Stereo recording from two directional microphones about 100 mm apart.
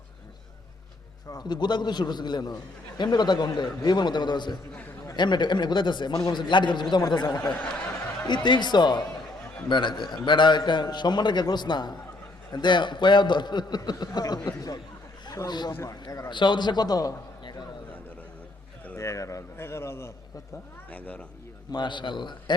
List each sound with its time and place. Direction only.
1.4 s a man's voice: 45° left (ahead or behind)
8.4 s a man's voice: 50° left (ahead or behind)
15.7 s a man's voice: 25° left (ahead or behind)
16.3 s a man's voice: 50° left (ahead or behind)
18.9 s a man's voice: 30° left (ahead or behind)
20.9 s speech: 15° left (ahead or behind)
21.7 s a man's voice: 50° left (ahead or behind)